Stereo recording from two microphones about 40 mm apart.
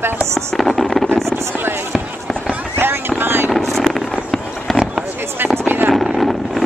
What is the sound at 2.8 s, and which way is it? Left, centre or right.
Fireworks, right.